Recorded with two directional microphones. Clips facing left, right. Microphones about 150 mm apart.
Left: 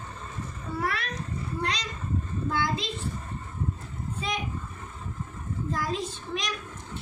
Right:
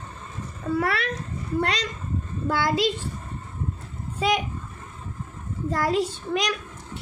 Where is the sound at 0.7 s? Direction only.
90° right.